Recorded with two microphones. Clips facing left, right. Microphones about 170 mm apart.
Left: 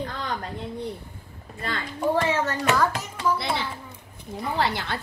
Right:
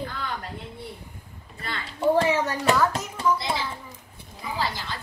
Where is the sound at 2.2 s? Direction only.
15° right (ahead or behind).